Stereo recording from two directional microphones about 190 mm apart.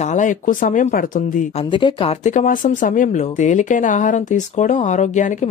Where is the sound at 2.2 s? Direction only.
45° left (ahead or behind).